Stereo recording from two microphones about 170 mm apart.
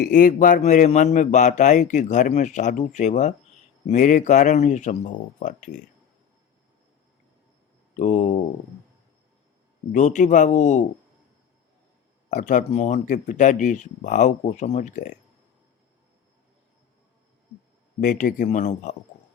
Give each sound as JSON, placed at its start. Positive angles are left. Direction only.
{"t": 0.0, "sound": "speech", "side_deg": 55}
{"t": 7.9, "sound": "speech", "side_deg": 45}
{"t": 9.9, "sound": "speech", "side_deg": 45}
{"t": 12.3, "sound": "speech", "side_deg": 45}
{"t": 18.0, "sound": "speech", "side_deg": 50}